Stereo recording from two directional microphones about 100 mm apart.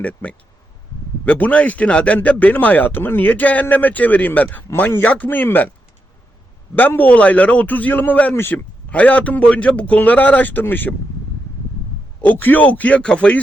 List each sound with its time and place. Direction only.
0.0 s speech: 15° left (ahead or behind)
6.7 s speech: 15° left (ahead or behind)
12.2 s speech: 15° left (ahead or behind)